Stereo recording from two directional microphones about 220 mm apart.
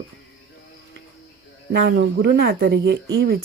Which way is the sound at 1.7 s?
50° right (ahead or behind).